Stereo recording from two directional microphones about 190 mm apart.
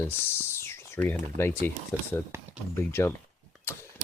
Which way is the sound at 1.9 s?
10° left (ahead or behind).